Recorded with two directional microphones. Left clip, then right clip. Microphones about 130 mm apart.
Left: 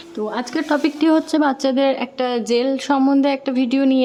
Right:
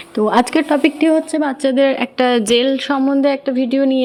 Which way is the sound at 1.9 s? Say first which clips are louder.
Right 6 dB; 20° right (ahead or behind).